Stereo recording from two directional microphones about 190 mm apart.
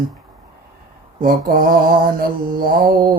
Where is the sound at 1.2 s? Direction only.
50° right (ahead or behind).